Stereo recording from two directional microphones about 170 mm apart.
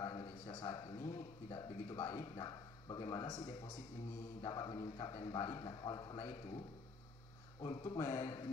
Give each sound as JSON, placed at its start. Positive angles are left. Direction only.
{"t": 0.0, "sound": "a man's voice", "side_deg": 25}
{"t": 2.2, "sound": "a man's voice", "side_deg": 25}
{"t": 7.6, "sound": "a man's voice", "side_deg": 25}
{"t": 8.2, "sound": "a sound", "side_deg": 35}